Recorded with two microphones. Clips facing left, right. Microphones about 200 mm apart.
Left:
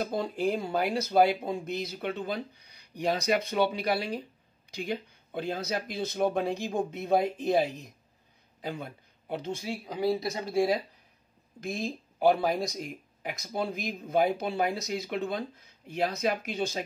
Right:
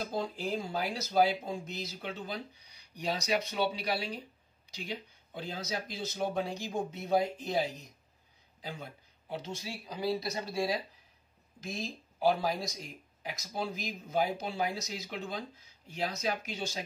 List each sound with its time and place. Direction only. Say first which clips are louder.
0.0 s speech: left 6 dB; 60° left (ahead or behind)